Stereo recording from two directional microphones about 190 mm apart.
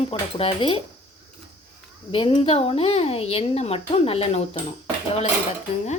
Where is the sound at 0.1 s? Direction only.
30° left (ahead or behind).